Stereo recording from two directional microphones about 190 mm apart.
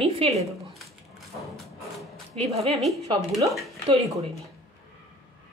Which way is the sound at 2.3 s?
30° right (ahead or behind).